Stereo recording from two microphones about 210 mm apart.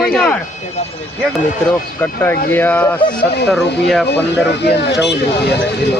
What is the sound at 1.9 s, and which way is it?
A man's voice, 10° left (ahead or behind).